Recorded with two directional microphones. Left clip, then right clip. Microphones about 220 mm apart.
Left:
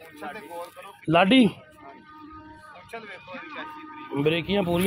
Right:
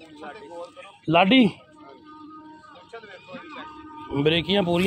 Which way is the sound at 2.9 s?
50° left (ahead or behind).